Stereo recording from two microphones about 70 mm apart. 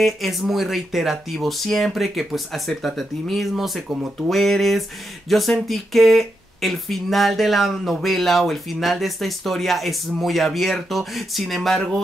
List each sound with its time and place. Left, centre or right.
0.0 s speech: centre